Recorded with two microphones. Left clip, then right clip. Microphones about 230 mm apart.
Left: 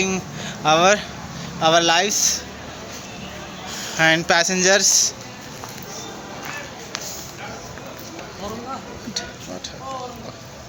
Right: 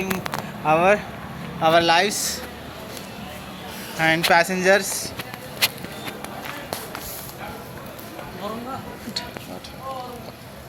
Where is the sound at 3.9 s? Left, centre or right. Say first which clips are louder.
Left 1 dB; left.